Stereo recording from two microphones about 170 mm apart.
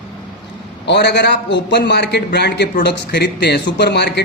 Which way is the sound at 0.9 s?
80° left.